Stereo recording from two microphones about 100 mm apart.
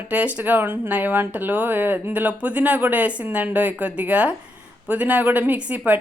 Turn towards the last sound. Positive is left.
turn(degrees=-15)  # may be behind; listen again after turning